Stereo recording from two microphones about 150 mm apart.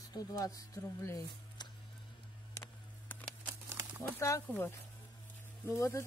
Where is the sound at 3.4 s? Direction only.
10° right (ahead or behind).